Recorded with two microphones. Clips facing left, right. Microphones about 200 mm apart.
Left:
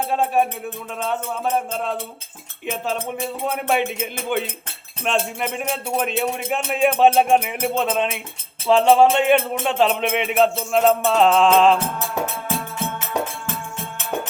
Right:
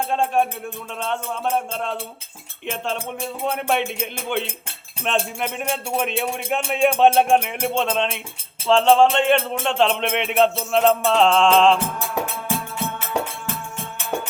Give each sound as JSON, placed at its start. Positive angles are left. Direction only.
{"t": 0.1, "sound": "music", "side_deg": 5}